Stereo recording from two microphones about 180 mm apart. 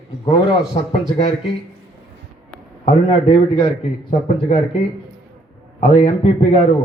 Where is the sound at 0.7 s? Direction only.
30° left (ahead or behind).